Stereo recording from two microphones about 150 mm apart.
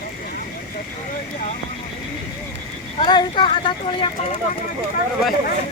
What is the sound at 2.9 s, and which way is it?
Speech, 35° left (ahead or behind).